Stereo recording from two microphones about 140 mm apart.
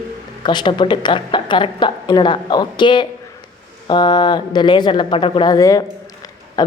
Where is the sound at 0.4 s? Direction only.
35° left (ahead or behind).